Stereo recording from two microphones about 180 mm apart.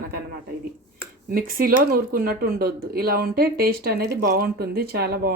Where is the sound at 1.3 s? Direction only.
55° right (ahead or behind).